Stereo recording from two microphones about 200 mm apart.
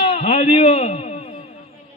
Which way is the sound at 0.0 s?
25° left (ahead or behind).